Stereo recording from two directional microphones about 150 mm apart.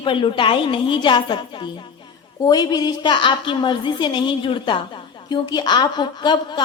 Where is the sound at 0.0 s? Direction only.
35° left (ahead or behind).